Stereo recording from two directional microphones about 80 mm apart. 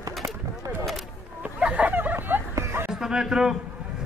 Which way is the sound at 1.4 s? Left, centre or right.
Centre.